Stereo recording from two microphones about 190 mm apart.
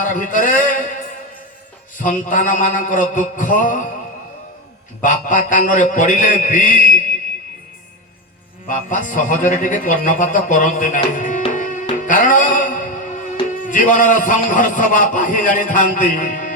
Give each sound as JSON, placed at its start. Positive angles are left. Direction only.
{"t": 0.0, "sound": "a man's voice", "side_deg": 45}
{"t": 2.0, "sound": "a man's voice", "side_deg": 45}
{"t": 5.0, "sound": "a man's voice", "side_deg": 45}
{"t": 8.6, "sound": "a man's voice", "side_deg": 45}
{"t": 11.5, "sound": "music", "side_deg": 45}
{"t": 13.7, "sound": "a man's voice", "side_deg": 45}